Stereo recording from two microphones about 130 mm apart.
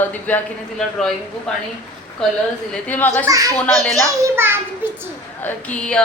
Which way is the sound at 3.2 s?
25° right (ahead or behind).